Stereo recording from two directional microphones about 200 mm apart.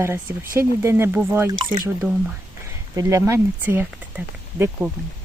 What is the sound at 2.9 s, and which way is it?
Speech, 15° right (ahead or behind).